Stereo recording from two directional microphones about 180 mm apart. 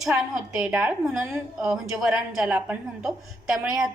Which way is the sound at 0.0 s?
Centre (ahead or behind).